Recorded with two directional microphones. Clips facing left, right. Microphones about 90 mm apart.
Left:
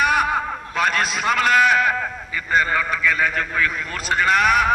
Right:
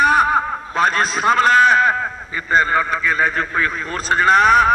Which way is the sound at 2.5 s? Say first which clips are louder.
Right 3 dB; 35° right (ahead or behind).